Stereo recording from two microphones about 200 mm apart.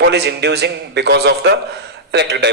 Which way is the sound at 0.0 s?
55° right (ahead or behind).